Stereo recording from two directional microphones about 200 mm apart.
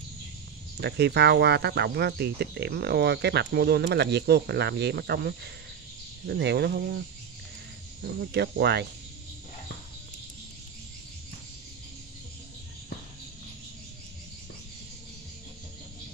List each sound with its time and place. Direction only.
0.7 s speech: 55° right (ahead or behind)
8.0 s speech: 55° right (ahead or behind)